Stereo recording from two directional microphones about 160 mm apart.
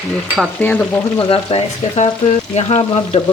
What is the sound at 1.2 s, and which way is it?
Speech, 35° left (ahead or behind).